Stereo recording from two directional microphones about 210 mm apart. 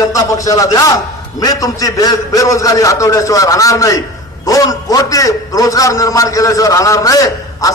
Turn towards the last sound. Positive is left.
turn(degrees=15)  # may be behind; listen again after turning